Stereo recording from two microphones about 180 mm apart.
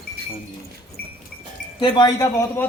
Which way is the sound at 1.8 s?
25° left (ahead or behind).